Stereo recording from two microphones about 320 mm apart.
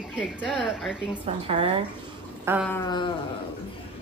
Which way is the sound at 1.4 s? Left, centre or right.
Centre.